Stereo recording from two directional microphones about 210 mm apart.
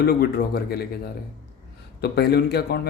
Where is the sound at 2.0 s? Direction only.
50° left (ahead or behind).